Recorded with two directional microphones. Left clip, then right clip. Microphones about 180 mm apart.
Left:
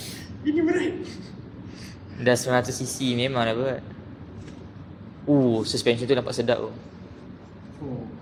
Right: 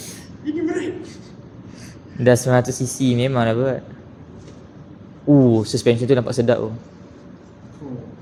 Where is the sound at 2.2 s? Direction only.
20° right (ahead or behind).